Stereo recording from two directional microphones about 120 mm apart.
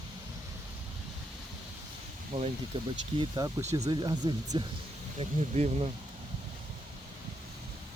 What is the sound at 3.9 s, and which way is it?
Speech, 40° right (ahead or behind).